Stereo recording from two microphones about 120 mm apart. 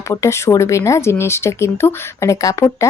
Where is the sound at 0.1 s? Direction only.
25° left (ahead or behind).